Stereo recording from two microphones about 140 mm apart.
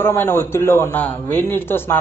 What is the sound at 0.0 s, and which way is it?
A man's voice, 15° left (ahead or behind).